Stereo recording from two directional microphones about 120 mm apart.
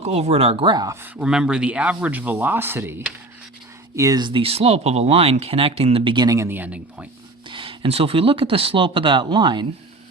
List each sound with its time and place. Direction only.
0.0 s speech: 60° right (ahead or behind); by 0.9 s 40° right (ahead or behind)
1.0 s speech: 10° right (ahead or behind)
3.9 s speech: 30° right (ahead or behind); by 6.1 s 55° right (ahead or behind)
6.1 s speech: 25° right (ahead or behind); by 7.1 s 10° right (ahead or behind)
7.4 s speech: 45° right (ahead or behind)